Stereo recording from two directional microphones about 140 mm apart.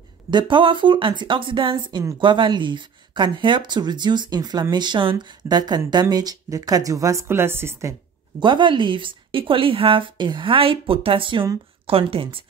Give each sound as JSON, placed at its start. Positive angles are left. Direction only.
{"t": 0.3, "sound": "a woman's voice", "side_deg": -35}
{"t": 8.4, "sound": "speech", "side_deg": -35}